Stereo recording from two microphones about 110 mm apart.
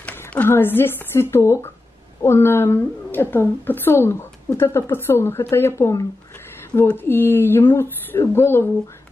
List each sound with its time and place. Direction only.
0.0 s a woman's voice: 15° left (ahead or behind)